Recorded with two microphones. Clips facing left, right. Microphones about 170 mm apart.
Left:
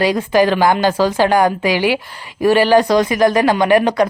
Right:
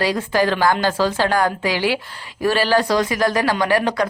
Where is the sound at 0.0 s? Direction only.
15° left (ahead or behind).